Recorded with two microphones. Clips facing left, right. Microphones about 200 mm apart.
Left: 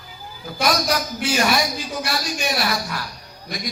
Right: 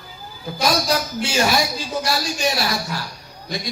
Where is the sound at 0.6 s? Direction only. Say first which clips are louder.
Right 1 dB; 25° right (ahead or behind).